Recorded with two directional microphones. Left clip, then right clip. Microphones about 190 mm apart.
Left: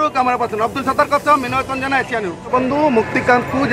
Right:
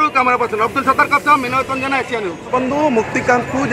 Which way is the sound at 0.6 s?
25° left (ahead or behind).